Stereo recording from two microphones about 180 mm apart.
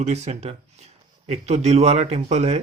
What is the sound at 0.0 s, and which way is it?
Speech, 40° right (ahead or behind).